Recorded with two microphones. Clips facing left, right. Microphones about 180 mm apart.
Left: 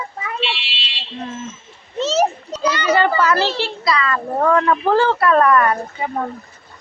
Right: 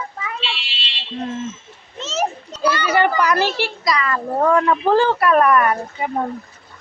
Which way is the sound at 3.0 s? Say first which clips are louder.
Right 1 dB; 15° right (ahead or behind).